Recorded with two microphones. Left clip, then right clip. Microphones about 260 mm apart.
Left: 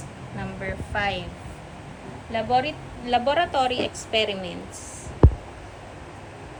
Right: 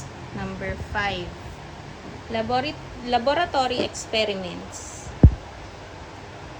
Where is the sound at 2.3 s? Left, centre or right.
Centre.